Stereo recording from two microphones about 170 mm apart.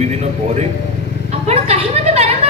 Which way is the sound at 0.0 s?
40° right (ahead or behind).